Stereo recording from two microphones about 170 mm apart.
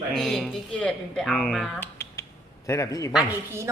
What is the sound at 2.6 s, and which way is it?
Speech, 15° left (ahead or behind).